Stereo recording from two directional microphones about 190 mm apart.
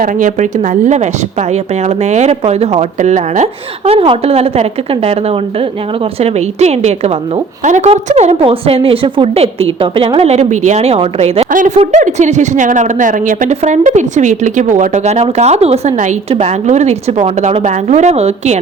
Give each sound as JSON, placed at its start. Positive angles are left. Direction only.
{"t": 0.0, "sound": "a woman's voice", "side_deg": -45}